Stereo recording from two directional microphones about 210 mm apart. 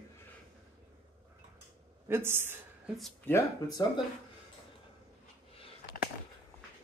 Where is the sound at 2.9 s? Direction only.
Centre (ahead or behind).